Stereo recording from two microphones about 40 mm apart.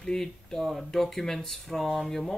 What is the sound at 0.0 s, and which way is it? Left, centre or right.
Speech, centre.